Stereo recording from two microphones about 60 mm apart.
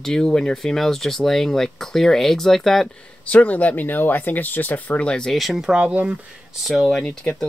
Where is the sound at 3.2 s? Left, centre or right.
Left.